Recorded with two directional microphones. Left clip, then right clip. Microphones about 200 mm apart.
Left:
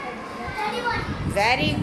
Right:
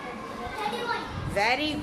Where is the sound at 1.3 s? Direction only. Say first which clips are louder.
Left 4 dB; 5° left (ahead or behind).